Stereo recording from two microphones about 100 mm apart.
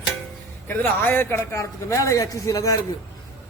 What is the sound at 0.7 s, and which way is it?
A man's voice, 20° left (ahead or behind).